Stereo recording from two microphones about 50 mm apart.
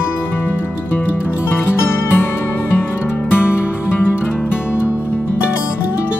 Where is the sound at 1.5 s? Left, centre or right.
Left.